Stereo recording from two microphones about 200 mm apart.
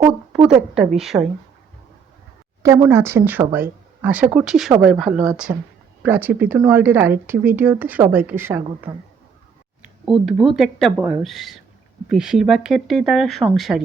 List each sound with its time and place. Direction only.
0.4 s speech: 5° right (ahead or behind)
2.6 s a woman's voice: 10° right (ahead or behind)